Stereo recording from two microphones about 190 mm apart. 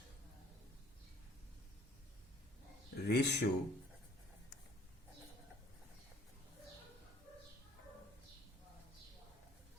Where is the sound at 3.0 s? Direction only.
60° left (ahead or behind).